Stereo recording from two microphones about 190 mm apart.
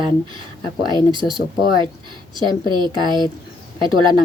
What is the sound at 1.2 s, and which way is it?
Speech, 25° right (ahead or behind).